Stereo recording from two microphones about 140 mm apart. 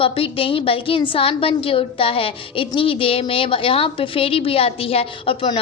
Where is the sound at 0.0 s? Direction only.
40° left (ahead or behind).